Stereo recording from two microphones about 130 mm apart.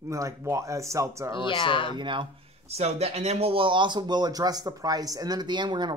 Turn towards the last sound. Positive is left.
turn(degrees=-35)  # may be behind; listen again after turning